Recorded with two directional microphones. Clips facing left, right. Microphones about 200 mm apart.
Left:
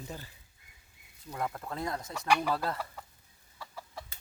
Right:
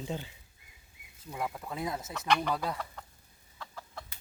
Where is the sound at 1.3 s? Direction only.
5° right (ahead or behind).